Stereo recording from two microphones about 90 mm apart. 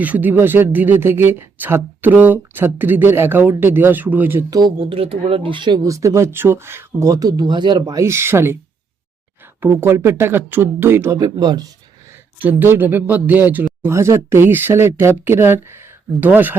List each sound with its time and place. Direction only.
0.0 s speech: 20° right (ahead or behind)
4.9 s speech: 90° right; by 5.8 s 60° right (ahead or behind)
5.8 s speech: 35° right (ahead or behind)
8.0 s speech: 30° right (ahead or behind)
9.6 s speech: 25° right (ahead or behind)
11.2 s speech: 45° right (ahead or behind)
12.4 s speech: 20° right (ahead or behind)
13.8 s speech: 30° right (ahead or behind)